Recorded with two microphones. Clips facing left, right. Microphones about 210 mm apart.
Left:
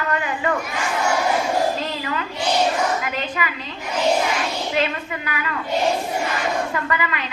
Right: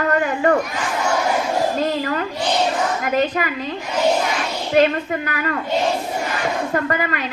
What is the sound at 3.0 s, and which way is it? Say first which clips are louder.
Speech: right 7 dB; 45° right (ahead or behind).